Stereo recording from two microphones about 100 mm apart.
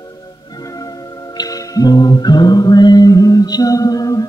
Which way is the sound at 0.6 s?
35° left (ahead or behind).